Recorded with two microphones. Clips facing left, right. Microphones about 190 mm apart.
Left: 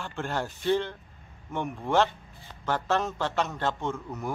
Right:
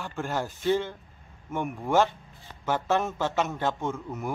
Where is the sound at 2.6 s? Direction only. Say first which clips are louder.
Right 1 dB; 15° right (ahead or behind).